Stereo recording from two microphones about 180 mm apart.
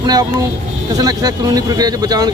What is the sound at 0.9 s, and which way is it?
Speech, 20° right (ahead or behind).